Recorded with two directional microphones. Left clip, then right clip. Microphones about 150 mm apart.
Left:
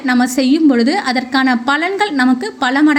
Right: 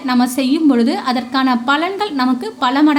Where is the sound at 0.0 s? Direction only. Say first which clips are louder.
Left 2 dB; 20° left (ahead or behind).